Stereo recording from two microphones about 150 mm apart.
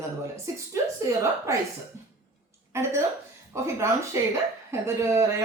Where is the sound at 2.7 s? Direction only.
20° right (ahead or behind).